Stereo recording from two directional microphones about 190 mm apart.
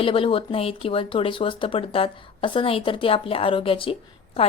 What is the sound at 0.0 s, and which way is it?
A woman's voice, 30° left (ahead or behind).